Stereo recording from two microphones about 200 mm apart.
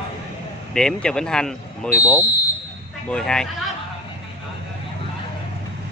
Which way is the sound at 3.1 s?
5° left (ahead or behind).